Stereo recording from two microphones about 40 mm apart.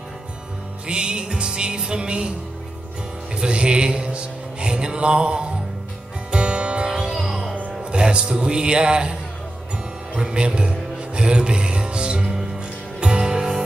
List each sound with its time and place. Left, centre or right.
0.8 s music: right
3.3 s music: right
7.8 s a man's voice: right
10.1 s music: right